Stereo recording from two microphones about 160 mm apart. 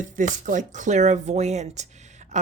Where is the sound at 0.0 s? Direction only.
55° right (ahead or behind).